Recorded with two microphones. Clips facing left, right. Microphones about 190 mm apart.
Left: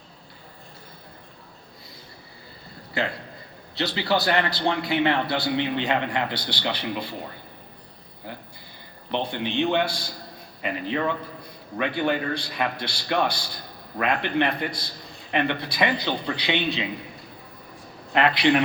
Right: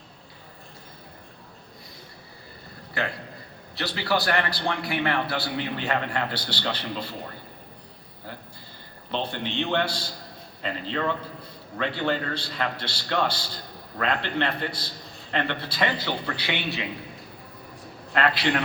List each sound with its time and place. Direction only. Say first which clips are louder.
3.8 s a man's voice: left 2 dB; 20° left (ahead or behind)
9.1 s a man's voice: left 3 dB; 15° left (ahead or behind)
18.1 s a man's voice: left 4 dB; 20° left (ahead or behind)